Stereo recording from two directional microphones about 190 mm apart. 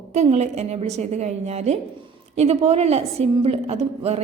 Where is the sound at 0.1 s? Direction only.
35° right (ahead or behind).